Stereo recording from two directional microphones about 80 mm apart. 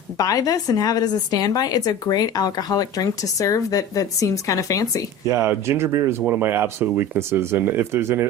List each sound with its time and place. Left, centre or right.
0.2 s a woman's voice: left
5.3 s speech: right